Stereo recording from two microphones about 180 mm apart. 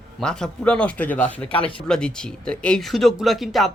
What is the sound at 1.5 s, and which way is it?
Speech, 30° left (ahead or behind).